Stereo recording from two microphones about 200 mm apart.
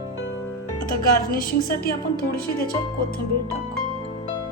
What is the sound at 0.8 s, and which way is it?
A woman's voice, 45° left (ahead or behind).